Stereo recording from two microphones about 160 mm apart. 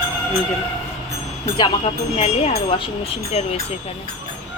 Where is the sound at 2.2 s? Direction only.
45° left (ahead or behind).